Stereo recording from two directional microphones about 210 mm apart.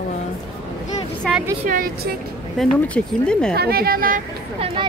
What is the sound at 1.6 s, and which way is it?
Speech, 40° right (ahead or behind).